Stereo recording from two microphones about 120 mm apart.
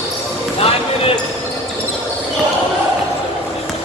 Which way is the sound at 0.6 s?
55° left (ahead or behind).